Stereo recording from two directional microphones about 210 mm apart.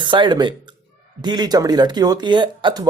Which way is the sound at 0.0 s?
20° right (ahead or behind).